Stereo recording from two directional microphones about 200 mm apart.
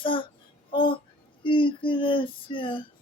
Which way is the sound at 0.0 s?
25° left (ahead or behind).